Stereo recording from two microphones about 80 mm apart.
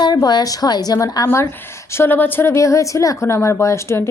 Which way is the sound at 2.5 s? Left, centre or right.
Left.